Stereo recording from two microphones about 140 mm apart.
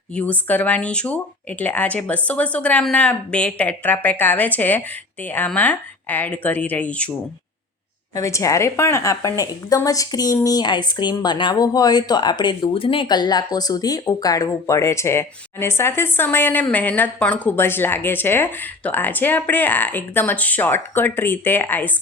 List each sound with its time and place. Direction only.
0.1 s a woman's voice: 10° left (ahead or behind)
8.1 s a woman's voice: 20° left (ahead or behind)